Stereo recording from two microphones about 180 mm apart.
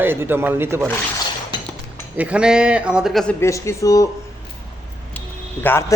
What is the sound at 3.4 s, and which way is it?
Speech, 15° left (ahead or behind).